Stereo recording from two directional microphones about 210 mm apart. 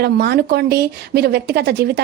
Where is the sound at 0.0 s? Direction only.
50° right (ahead or behind).